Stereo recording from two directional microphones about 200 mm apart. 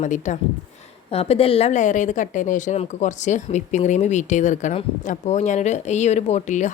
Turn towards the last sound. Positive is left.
turn(degrees=35)  # may be behind; listen again after turning